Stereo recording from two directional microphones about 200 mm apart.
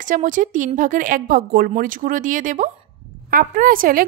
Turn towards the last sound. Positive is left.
turn(degrees=-45)  # may be behind; listen again after turning